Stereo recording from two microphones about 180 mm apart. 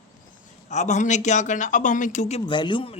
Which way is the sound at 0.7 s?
40° left (ahead or behind).